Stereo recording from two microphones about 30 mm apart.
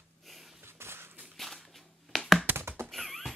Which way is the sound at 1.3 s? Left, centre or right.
Centre.